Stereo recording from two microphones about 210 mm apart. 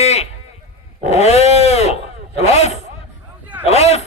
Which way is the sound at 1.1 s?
30° left (ahead or behind).